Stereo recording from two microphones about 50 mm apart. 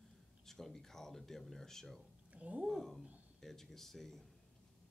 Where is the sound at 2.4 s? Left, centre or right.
Right.